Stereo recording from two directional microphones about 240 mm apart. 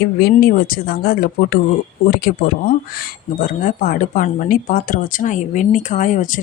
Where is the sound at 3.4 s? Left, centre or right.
Left.